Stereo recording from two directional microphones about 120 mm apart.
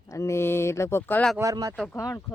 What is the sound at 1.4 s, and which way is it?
Speech, 30° right (ahead or behind).